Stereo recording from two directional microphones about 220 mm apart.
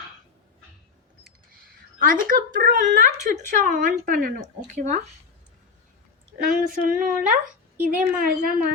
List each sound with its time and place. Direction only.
1.6 s a sound: 40° right (ahead or behind)
2.2 s speech: 35° right (ahead or behind)
6.5 s speech: 40° right (ahead or behind)